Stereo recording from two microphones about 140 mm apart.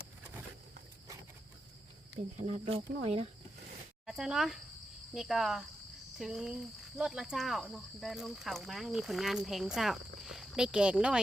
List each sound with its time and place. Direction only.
2.4 s speech: 45° right (ahead or behind)
4.0 s speech: 5° right (ahead or behind)